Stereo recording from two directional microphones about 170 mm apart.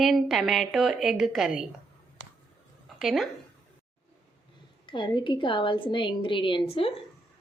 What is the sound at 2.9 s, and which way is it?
Speech, centre (ahead or behind).